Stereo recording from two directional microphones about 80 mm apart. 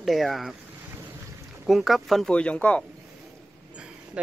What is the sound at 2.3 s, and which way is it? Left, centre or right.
Speech, centre.